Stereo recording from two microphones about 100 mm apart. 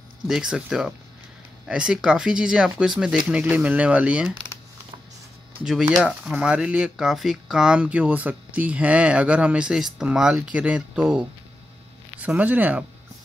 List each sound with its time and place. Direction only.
0.3 s speech: 5° right (ahead or behind)
5.6 s speech: 10° right (ahead or behind)